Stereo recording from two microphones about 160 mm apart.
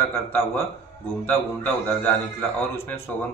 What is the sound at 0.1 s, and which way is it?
A man's voice, 15° left (ahead or behind).